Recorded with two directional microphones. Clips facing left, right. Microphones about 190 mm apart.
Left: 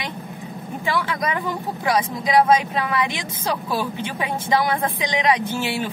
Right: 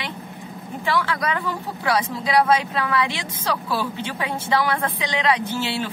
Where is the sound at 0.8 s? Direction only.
15° left (ahead or behind).